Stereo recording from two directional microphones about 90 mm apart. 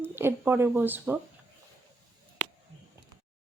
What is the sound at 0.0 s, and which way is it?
Speech, 25° right (ahead or behind).